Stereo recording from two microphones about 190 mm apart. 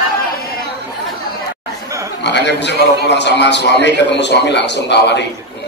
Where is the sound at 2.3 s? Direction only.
65° left (ahead or behind).